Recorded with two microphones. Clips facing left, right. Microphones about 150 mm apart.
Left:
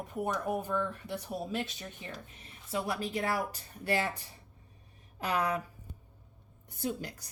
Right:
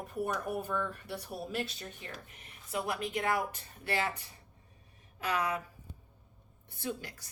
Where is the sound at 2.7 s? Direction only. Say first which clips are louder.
Left 1 dB; 30° left (ahead or behind).